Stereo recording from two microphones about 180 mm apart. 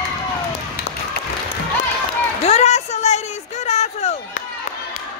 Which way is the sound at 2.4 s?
35° left (ahead or behind).